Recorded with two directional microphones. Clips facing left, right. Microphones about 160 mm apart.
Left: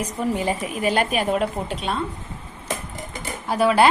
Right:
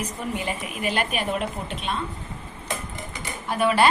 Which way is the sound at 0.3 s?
35° left (ahead or behind).